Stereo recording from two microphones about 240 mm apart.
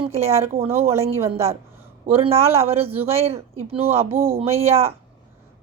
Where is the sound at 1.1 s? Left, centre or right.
Centre.